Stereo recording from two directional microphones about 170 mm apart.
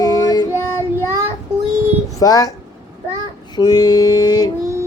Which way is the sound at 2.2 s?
20° left (ahead or behind).